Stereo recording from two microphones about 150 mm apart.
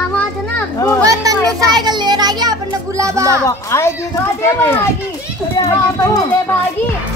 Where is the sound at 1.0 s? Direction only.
25° right (ahead or behind).